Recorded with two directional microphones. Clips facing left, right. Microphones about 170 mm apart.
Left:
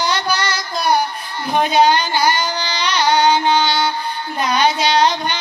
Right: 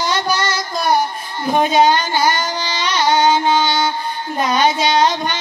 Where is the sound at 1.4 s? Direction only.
45° right (ahead or behind).